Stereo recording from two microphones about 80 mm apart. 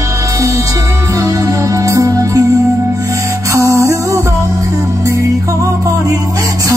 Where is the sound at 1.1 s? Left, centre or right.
Right.